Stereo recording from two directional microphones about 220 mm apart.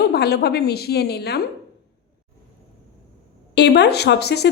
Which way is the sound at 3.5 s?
50° left (ahead or behind).